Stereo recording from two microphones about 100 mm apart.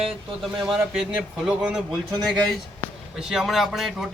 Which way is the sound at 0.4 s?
Centre (ahead or behind).